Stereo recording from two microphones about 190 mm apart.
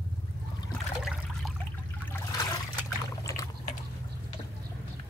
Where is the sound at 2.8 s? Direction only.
15° left (ahead or behind).